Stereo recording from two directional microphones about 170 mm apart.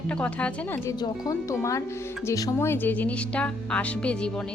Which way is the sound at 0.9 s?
20° left (ahead or behind).